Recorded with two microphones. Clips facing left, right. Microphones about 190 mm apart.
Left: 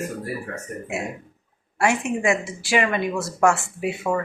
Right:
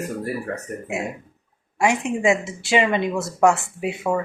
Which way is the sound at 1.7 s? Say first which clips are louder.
Right 1 dB; 15° right (ahead or behind).